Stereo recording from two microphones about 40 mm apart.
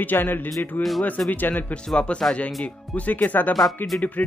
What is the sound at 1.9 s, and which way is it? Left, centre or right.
Speech, left.